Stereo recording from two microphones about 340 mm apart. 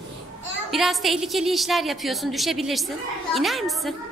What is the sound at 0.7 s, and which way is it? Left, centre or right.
A woman's voice, centre.